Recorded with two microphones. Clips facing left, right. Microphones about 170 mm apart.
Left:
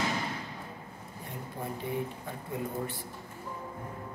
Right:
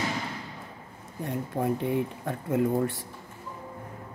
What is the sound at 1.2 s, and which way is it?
Speech, 70° right (ahead or behind).